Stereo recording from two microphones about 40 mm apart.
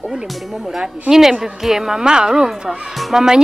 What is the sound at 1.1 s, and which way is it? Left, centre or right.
A woman's voice, centre.